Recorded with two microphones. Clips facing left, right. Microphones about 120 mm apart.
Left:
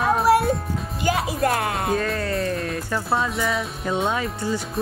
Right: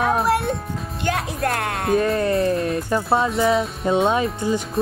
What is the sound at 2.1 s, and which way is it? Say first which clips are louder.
Speech: right 5 dB; 25° right (ahead or behind).